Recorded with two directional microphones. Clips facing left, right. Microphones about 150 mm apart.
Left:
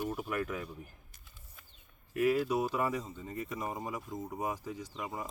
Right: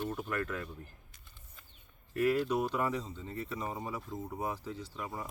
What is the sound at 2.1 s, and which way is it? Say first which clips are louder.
Speech: even; 10° left (ahead or behind).